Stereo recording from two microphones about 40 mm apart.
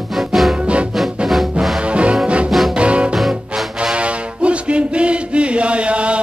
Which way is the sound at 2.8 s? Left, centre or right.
Right.